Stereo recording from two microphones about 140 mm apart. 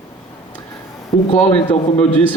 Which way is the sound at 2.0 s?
10° left (ahead or behind).